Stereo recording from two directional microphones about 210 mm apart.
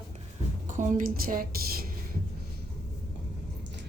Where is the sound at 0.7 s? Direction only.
35° right (ahead or behind).